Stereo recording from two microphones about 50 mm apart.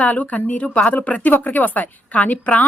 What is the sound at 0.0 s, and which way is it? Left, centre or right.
A woman's voice, left.